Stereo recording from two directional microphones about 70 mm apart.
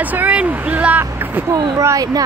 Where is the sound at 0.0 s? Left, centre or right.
Right.